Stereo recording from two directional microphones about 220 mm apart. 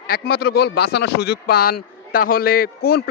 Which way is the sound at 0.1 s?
45° left (ahead or behind).